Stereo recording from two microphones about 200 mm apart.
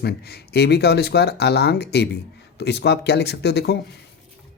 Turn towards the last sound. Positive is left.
turn(degrees=55)  # may be behind; listen again after turning